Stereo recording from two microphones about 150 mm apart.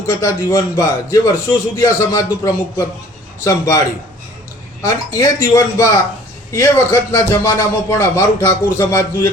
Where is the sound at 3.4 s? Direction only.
20° left (ahead or behind).